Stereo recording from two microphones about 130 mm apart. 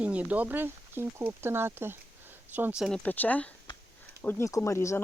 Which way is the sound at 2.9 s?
15° left (ahead or behind).